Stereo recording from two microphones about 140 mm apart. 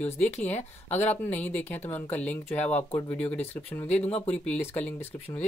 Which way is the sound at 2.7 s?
50° left (ahead or behind).